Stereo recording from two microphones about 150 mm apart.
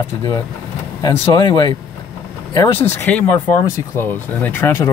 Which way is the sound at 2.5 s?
20° left (ahead or behind).